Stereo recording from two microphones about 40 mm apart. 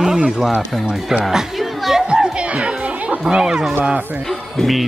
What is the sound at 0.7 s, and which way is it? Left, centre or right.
Speech, centre.